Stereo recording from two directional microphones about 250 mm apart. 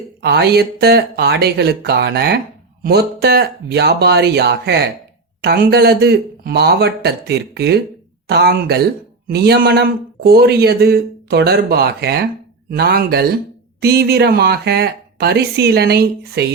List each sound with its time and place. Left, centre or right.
0.2 s a man's voice: right